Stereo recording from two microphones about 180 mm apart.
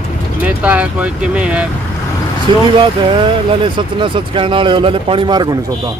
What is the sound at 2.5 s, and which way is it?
Speech, 25° right (ahead or behind).